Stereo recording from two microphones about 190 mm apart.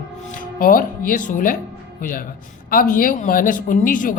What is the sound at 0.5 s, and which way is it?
A man's voice, 45° left (ahead or behind).